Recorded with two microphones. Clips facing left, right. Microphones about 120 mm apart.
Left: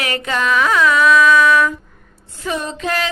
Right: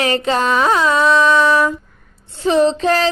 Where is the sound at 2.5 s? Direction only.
30° right (ahead or behind).